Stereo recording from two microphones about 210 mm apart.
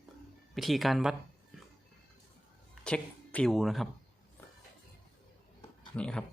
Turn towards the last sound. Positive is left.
turn(degrees=5)  # may be behind; listen again after turning